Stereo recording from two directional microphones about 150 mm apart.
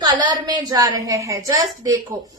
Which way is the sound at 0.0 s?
30° right (ahead or behind).